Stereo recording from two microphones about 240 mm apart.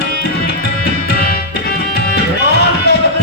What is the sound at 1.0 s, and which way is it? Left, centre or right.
Music, left.